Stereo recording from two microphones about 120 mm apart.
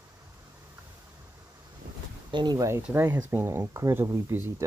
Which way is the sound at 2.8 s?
20° right (ahead or behind).